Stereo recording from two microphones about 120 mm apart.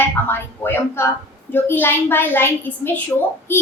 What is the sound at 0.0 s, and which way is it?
A woman's voice, 20° left (ahead or behind).